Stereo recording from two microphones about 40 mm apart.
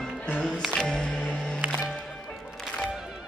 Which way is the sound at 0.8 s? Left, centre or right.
Centre.